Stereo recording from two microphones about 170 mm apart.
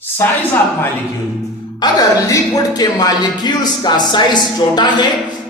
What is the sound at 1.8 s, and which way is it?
Speech, 20° left (ahead or behind).